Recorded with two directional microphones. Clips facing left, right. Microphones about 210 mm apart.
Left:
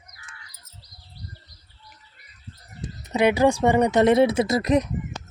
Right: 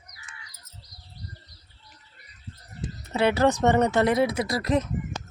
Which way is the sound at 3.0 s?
15° left (ahead or behind).